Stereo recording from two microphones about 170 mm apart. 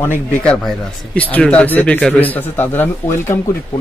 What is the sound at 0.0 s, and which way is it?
A man's voice, 10° left (ahead or behind).